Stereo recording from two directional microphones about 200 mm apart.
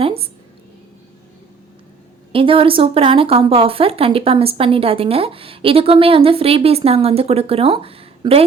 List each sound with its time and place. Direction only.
0.0 s speech: 30° right (ahead or behind)
2.3 s speech: 25° right (ahead or behind)